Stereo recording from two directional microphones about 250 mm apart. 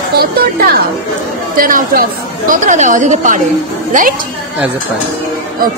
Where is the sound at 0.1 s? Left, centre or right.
Right.